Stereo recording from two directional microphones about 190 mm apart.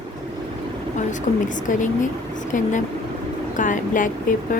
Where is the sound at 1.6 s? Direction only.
40° left (ahead or behind).